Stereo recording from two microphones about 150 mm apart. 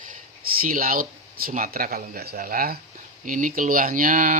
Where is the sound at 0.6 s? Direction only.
75° right (ahead or behind).